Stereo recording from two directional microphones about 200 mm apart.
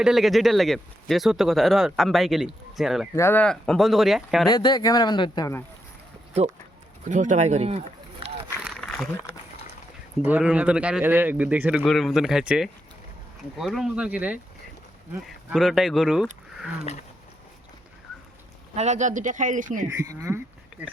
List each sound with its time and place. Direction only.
0.0 s speech: centre (ahead or behind)
3.2 s speech: 10° left (ahead or behind)
4.4 s speech: 20° left (ahead or behind)
7.1 s speech: 35° right (ahead or behind)
8.6 s a sound: 5° left (ahead or behind)
10.2 s speech: 5° right (ahead or behind)
18.8 s speech: 35° right (ahead or behind)
19.9 s speech: 15° right (ahead or behind)